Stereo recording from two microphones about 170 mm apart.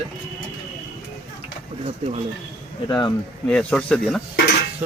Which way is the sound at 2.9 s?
30° left (ahead or behind).